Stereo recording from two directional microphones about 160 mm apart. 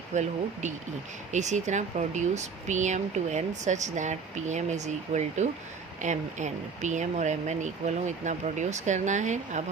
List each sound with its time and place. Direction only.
0.1 s speech: 50° right (ahead or behind)